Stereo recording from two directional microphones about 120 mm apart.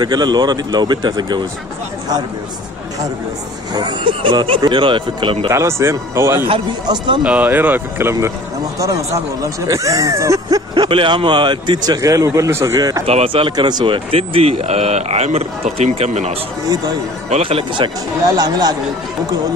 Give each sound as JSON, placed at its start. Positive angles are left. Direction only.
{"t": 0.0, "sound": "a man's voice", "side_deg": -35}
{"t": 3.7, "sound": "speech", "side_deg": -40}
{"t": 5.5, "sound": "speech", "side_deg": -25}
{"t": 6.5, "sound": "a man's voice", "side_deg": -40}
{"t": 7.2, "sound": "speech", "side_deg": -15}
{"t": 10.7, "sound": "a man's voice", "side_deg": -45}
{"t": 13.0, "sound": "speech", "side_deg": -55}
{"t": 16.6, "sound": "a man's voice", "side_deg": -35}
{"t": 17.3, "sound": "a man's voice", "side_deg": -50}